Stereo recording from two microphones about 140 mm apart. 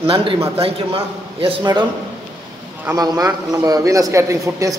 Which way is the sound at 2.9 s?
25° right (ahead or behind).